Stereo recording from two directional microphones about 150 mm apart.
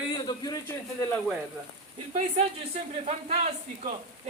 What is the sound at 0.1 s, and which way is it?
Speech, 30° left (ahead or behind).